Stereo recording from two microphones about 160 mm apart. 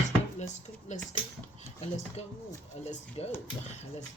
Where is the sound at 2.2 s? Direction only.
40° left (ahead or behind).